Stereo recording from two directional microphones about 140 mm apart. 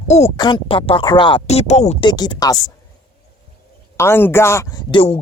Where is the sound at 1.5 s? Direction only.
50° left (ahead or behind).